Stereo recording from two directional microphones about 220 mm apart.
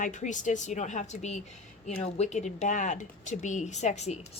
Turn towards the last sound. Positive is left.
turn(degrees=30)  # may be behind; listen again after turning